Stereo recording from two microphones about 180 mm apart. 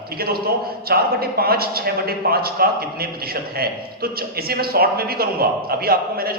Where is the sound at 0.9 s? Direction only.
60° right (ahead or behind).